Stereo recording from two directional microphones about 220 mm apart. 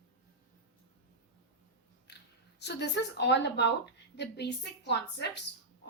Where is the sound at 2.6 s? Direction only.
50° left (ahead or behind).